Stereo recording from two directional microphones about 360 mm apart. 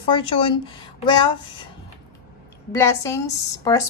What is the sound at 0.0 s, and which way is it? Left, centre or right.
Speech, centre.